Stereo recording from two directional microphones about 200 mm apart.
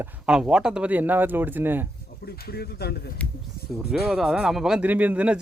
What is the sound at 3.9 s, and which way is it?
Speech, centre (ahead or behind).